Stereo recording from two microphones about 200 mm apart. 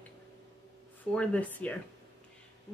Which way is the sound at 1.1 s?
5° left (ahead or behind).